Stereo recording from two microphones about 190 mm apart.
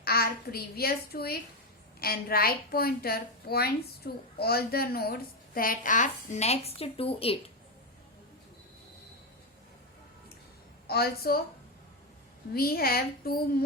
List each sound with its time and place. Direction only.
0.0 s a woman's voice: 55° left (ahead or behind); by 7.3 s 30° left (ahead or behind)
10.8 s a woman's voice: 55° left (ahead or behind)
12.5 s a woman's voice: 50° left (ahead or behind)